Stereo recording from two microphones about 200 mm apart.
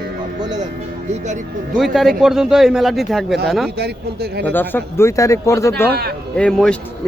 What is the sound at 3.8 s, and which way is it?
Speech, 55° right (ahead or behind).